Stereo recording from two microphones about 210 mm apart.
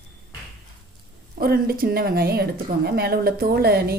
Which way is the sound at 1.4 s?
45° right (ahead or behind).